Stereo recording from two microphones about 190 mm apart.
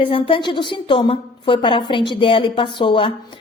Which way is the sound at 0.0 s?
30° left (ahead or behind).